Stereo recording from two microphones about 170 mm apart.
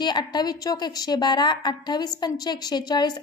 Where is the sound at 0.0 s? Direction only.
25° left (ahead or behind).